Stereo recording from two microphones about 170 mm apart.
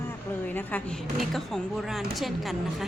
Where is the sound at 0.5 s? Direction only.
5° left (ahead or behind).